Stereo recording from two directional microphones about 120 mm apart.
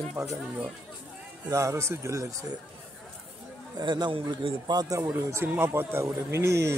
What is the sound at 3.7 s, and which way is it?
A man's voice, 35° right (ahead or behind).